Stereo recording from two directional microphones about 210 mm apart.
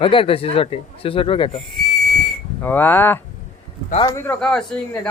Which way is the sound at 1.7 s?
Centre (ahead or behind).